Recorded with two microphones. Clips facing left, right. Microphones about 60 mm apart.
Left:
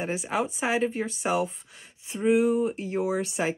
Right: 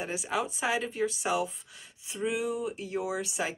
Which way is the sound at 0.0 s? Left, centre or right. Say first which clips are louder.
Left 4 dB; left.